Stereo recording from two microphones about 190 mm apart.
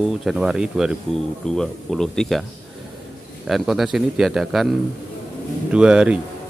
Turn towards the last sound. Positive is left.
turn(degrees=-5)  # may be behind; listen again after turning